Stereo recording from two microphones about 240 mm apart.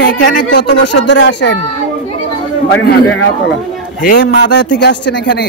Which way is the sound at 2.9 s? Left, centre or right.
Left.